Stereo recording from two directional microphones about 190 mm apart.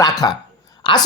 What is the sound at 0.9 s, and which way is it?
Speech, 25° left (ahead or behind).